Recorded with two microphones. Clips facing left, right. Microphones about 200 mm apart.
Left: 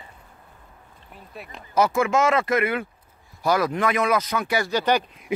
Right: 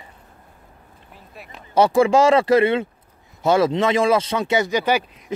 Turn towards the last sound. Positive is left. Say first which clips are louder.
# left 2 dB
turn(degrees=10)  # may be behind; listen again after turning